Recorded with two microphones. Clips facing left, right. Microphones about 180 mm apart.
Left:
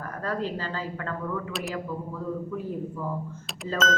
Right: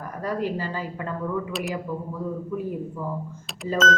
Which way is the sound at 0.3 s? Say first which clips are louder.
Right 3 dB; 15° right (ahead or behind).